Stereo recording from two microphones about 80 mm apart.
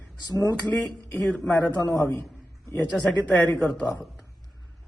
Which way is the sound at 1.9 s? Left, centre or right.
Left.